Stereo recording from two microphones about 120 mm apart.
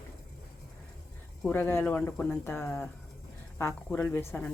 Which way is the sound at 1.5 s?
15° left (ahead or behind).